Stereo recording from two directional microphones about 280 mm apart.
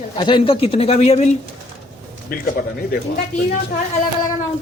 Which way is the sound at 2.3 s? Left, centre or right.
Left.